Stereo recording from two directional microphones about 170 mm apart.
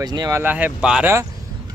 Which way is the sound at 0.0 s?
25° right (ahead or behind).